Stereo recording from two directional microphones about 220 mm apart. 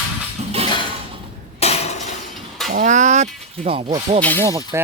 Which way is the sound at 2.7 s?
35° right (ahead or behind).